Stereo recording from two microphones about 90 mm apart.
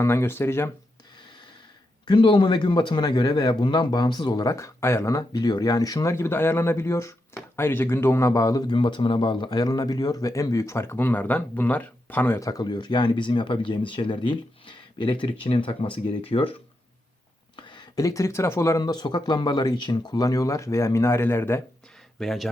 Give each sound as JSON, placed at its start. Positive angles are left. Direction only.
{"t": 0.0, "sound": "speech", "side_deg": 30}
{"t": 2.0, "sound": "a man's voice", "side_deg": 65}
{"t": 4.5, "sound": "speech", "side_deg": 30}
{"t": 5.4, "sound": "speech", "side_deg": 50}
{"t": 8.6, "sound": "a man's voice", "side_deg": 60}
{"t": 9.6, "sound": "speech", "side_deg": 45}
{"t": 12.4, "sound": "speech", "side_deg": 45}
{"t": 17.6, "sound": "a sound", "side_deg": 60}
{"t": 17.9, "sound": "speech", "side_deg": 35}
{"t": 18.8, "sound": "speech", "side_deg": 50}
{"t": 22.2, "sound": "speech", "side_deg": 0}